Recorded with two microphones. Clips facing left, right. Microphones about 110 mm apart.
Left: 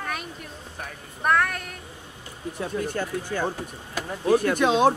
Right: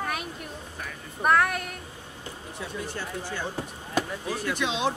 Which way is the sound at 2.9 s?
50° left (ahead or behind).